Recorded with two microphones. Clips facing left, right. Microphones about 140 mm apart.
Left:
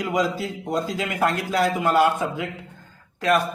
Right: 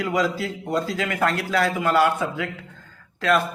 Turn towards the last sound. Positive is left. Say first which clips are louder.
# even
turn(degrees=15)  # may be behind; listen again after turning